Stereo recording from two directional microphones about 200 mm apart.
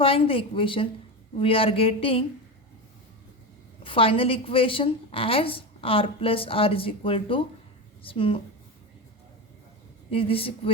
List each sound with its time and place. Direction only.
0.0 s a woman's voice: 25° left (ahead or behind)
3.8 s a woman's voice: 25° left (ahead or behind)
10.1 s a woman's voice: 30° left (ahead or behind)